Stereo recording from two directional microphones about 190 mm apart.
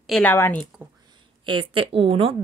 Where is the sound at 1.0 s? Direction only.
25° right (ahead or behind).